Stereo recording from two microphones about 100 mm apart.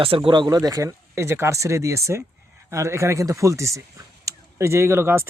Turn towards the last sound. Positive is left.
turn(degrees=-25)  # may be behind; listen again after turning